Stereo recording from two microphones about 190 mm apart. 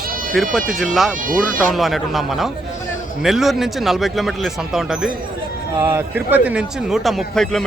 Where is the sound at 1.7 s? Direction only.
Centre (ahead or behind).